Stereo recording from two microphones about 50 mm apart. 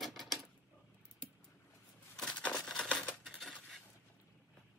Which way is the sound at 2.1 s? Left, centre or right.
Centre.